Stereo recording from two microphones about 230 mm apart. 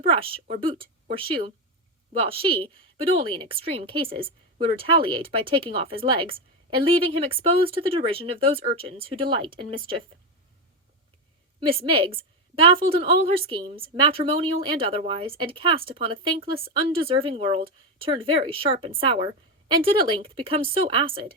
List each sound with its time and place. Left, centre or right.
0.0 s a woman's voice: right
11.6 s a woman's voice: right